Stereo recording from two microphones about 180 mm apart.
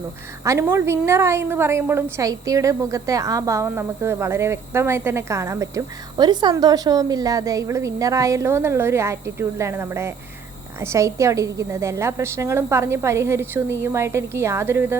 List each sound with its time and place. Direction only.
0.4 s a woman's voice: 15° right (ahead or behind)